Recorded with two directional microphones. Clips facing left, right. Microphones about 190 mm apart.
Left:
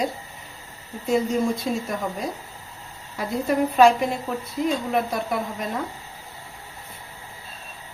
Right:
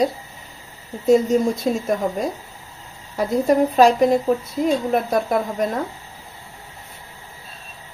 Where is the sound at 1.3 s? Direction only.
40° right (ahead or behind).